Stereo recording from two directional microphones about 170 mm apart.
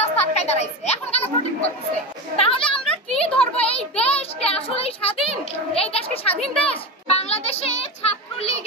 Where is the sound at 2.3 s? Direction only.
35° left (ahead or behind).